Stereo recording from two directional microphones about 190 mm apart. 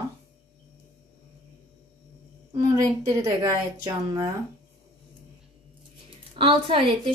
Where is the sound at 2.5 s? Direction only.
20° right (ahead or behind).